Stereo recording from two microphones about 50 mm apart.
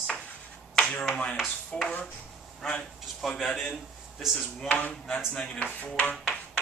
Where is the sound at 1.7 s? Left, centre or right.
Centre.